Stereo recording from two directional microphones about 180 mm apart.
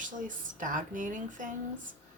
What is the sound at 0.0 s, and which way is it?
A woman's voice, 45° right (ahead or behind).